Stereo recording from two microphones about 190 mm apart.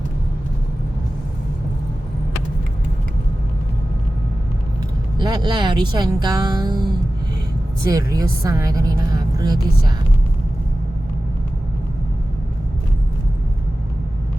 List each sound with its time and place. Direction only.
5.1 s a woman's voice: 25° right (ahead or behind)
7.9 s a woman's voice: 20° right (ahead or behind)